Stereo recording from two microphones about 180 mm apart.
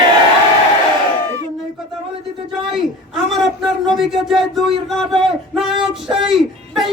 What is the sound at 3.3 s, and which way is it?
A man's voice, centre (ahead or behind).